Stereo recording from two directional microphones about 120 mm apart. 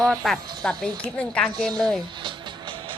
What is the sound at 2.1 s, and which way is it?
Music, 40° right (ahead or behind).